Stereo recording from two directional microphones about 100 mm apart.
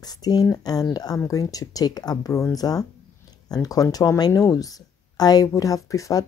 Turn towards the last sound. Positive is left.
turn(degrees=35)  # may be behind; listen again after turning